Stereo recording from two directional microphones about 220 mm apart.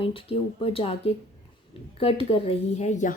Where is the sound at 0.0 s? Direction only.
25° left (ahead or behind).